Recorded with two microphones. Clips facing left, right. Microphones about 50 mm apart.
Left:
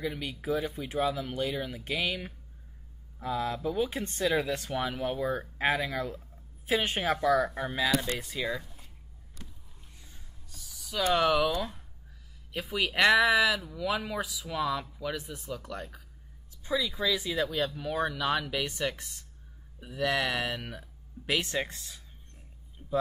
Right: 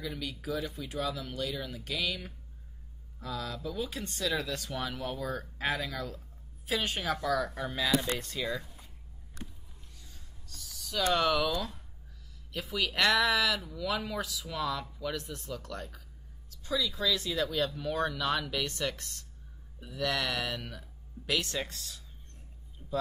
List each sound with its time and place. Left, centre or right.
0.0 s speech: left
7.8 s speech: centre
9.9 s a sound: centre
12.5 s a woman's voice: centre